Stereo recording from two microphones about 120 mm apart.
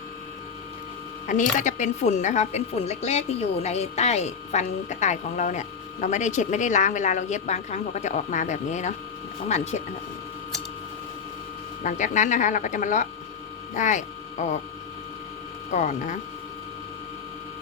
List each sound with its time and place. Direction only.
1.3 s a woman's voice: 90° left
11.8 s a woman's voice: 90° left
15.7 s a woman's voice: 85° left